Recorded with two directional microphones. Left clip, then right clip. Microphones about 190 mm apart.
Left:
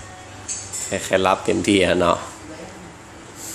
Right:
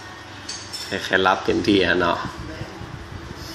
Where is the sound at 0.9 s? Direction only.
20° left (ahead or behind).